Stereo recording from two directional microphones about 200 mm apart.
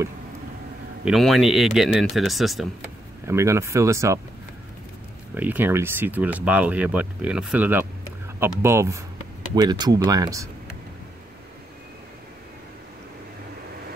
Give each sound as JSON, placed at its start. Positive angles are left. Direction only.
{"t": 1.0, "sound": "speech", "side_deg": 0}
{"t": 3.3, "sound": "speech", "side_deg": -15}
{"t": 5.3, "sound": "speech", "side_deg": -10}